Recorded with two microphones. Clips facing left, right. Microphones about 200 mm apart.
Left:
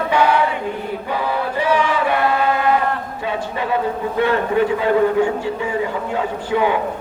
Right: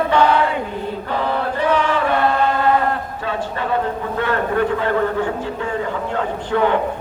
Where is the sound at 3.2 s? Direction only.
15° left (ahead or behind).